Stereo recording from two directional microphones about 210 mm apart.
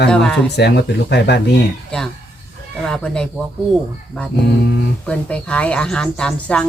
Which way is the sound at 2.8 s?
5° left (ahead or behind).